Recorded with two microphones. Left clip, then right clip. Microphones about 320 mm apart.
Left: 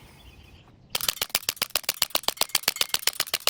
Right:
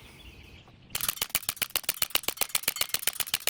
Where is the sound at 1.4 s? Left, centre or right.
Centre.